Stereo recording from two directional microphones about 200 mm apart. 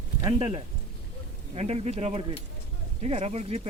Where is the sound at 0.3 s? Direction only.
25° right (ahead or behind).